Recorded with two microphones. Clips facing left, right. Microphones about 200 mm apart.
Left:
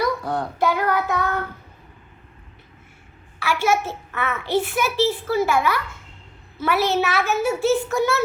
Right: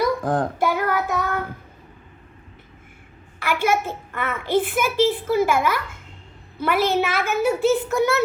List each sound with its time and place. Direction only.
0.0 s child singing: 50° right (ahead or behind)
3.4 s a child's voice: 55° right (ahead or behind)